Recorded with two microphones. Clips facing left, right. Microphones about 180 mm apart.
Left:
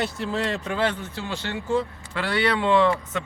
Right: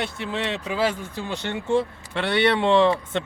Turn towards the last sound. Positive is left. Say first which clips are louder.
# right 2 dB
turn(degrees=-25)  # may be behind; listen again after turning